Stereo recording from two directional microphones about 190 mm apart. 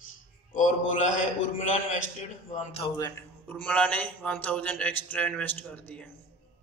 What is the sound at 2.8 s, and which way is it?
Speech, 25° left (ahead or behind).